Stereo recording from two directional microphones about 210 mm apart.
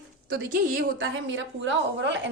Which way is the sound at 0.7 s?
60° right (ahead or behind).